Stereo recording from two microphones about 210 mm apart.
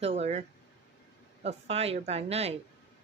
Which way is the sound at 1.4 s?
30° right (ahead or behind).